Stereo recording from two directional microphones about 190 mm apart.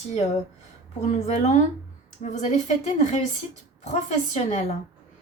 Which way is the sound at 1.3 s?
40° left (ahead or behind).